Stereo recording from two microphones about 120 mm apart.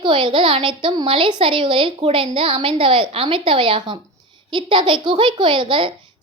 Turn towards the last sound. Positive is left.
turn(degrees=-45)  # may be behind; listen again after turning